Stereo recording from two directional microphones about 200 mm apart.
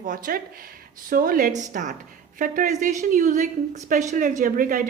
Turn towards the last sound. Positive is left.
turn(degrees=-45)  # may be behind; listen again after turning